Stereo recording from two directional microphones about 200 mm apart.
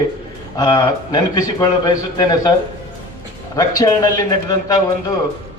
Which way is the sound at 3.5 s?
20° left (ahead or behind).